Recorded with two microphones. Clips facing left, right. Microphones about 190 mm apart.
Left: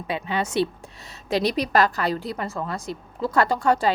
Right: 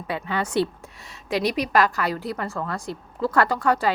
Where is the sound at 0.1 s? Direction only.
20° left (ahead or behind).